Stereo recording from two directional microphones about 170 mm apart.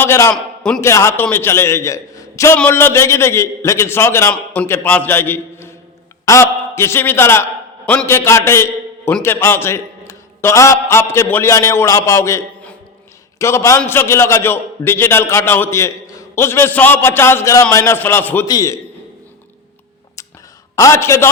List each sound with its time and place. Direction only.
0.0 s a man's voice: 15° left (ahead or behind)
20.7 s a man's voice: 15° left (ahead or behind)